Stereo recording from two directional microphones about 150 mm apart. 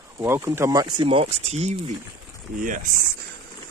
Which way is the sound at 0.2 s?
15° right (ahead or behind).